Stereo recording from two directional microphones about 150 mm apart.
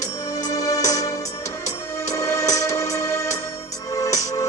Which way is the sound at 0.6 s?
20° left (ahead or behind).